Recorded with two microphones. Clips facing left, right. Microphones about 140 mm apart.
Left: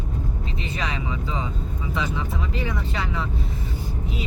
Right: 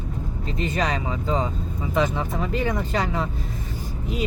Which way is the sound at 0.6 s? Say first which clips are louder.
Right 6 dB; 40° right (ahead or behind).